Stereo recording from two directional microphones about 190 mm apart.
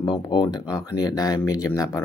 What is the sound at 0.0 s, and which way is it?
Speech, 25° left (ahead or behind).